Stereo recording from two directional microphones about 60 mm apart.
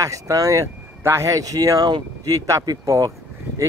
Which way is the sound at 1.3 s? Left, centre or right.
Right.